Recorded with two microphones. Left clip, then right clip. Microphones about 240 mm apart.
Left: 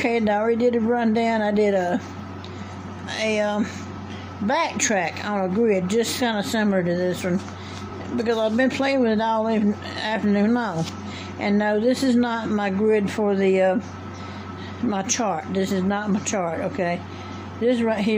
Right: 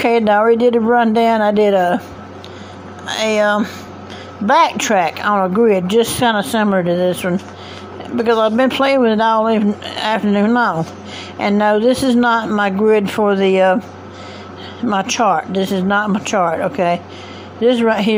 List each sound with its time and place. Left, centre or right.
0.0 s a woman's voice: centre
3.1 s a woman's voice: centre
14.9 s a woman's voice: centre